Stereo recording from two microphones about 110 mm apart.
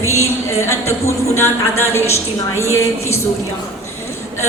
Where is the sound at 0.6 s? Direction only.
25° left (ahead or behind).